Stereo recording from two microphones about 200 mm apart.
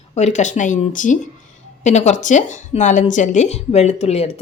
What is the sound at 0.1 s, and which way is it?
A woman's voice, 35° left (ahead or behind).